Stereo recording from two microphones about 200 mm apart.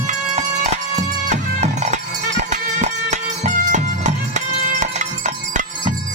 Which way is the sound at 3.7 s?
35° right (ahead or behind).